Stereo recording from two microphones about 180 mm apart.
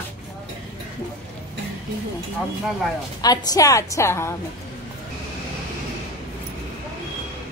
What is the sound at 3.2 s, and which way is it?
A woman's voice, 20° left (ahead or behind).